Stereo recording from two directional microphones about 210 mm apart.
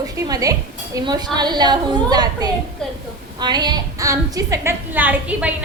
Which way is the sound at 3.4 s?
20° right (ahead or behind).